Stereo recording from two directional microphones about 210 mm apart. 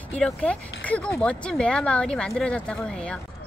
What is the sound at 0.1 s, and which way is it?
A woman's voice, 5° left (ahead or behind).